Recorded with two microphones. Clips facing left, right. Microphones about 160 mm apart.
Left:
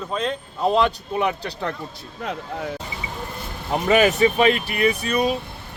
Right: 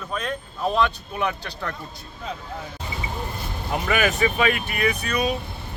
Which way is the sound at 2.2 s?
65° left (ahead or behind).